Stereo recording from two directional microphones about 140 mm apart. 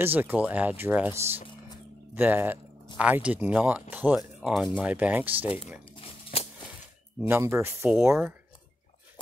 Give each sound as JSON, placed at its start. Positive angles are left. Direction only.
{"t": 0.0, "sound": "speech", "side_deg": -15}
{"t": 5.9, "sound": "a sound", "side_deg": 40}
{"t": 7.2, "sound": "speech", "side_deg": -15}